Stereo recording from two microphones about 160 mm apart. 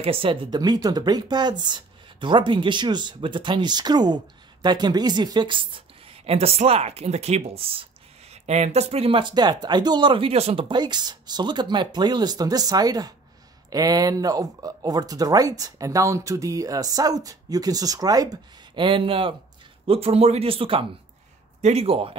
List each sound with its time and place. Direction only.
0.0 s speech: 35° right (ahead or behind)